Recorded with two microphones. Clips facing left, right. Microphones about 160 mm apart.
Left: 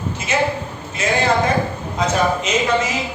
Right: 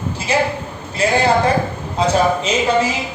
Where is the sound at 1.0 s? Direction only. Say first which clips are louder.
Right 3 dB; 35° right (ahead or behind).